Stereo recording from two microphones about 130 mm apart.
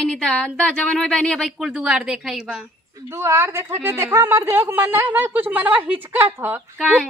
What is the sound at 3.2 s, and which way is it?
A woman's voice, 20° right (ahead or behind).